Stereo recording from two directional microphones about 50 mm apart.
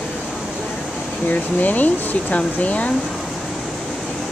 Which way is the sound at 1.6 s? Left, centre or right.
Left.